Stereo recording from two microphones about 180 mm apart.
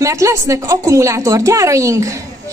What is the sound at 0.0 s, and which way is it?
A woman's voice, 15° right (ahead or behind).